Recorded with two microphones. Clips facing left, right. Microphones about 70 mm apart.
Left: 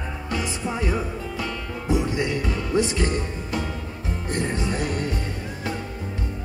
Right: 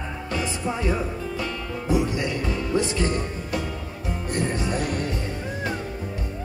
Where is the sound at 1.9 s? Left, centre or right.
Left.